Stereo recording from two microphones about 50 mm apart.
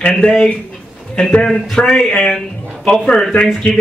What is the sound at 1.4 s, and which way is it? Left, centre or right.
A man's voice, centre.